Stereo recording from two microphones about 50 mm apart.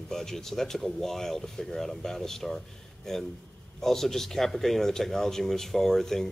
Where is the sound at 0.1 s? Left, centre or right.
Centre.